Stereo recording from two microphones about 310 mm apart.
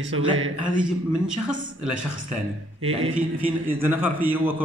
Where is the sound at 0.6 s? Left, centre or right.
Centre.